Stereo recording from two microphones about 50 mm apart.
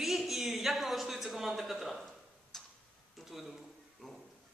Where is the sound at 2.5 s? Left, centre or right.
Centre.